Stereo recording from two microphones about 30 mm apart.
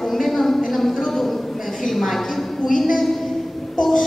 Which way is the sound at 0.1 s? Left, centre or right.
Centre.